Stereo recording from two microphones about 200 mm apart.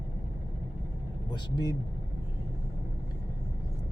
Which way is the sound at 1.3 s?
20° left (ahead or behind).